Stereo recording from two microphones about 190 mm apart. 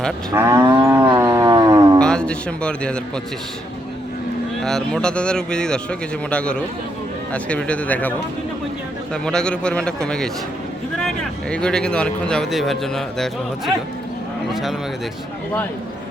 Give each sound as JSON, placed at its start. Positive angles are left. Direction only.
{"t": 0.3, "sound": "moo", "side_deg": -15}
{"t": 1.0, "sound": "a sound", "side_deg": -20}
{"t": 2.0, "sound": "speech", "side_deg": 5}
{"t": 4.6, "sound": "speech", "side_deg": 5}
{"t": 9.2, "sound": "speech", "side_deg": 5}
{"t": 11.5, "sound": "speech", "side_deg": 5}
{"t": 14.5, "sound": "speech", "side_deg": 0}